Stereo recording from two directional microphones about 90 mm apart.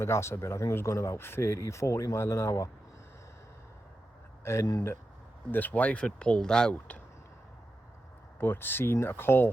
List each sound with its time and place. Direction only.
0.0 s speech: 30° left (ahead or behind)
4.6 s speech: 40° left (ahead or behind)
5.5 s speech: 20° left (ahead or behind)
8.4 s speech: 25° left (ahead or behind)